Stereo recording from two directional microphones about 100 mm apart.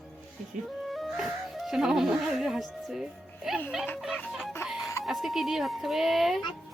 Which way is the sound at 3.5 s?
5° right (ahead or behind).